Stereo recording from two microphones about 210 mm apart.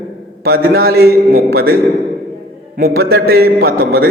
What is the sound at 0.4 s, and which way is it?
A man's voice, 45° right (ahead or behind).